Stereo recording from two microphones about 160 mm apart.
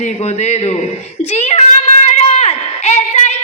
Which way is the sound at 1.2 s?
40° left (ahead or behind).